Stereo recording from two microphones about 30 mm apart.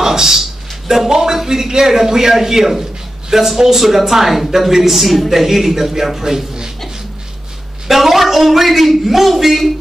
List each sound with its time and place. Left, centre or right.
0.0 s a man's voice: centre
7.9 s a man's voice: centre